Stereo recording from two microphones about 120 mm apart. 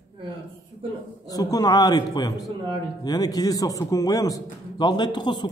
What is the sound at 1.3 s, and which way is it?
A man's voice, 30° left (ahead or behind).